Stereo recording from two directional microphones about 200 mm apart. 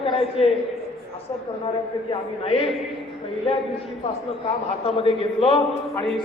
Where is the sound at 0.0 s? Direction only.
25° left (ahead or behind).